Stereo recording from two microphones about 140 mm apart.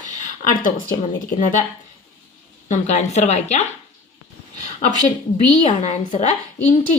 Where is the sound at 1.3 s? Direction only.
70° left (ahead or behind).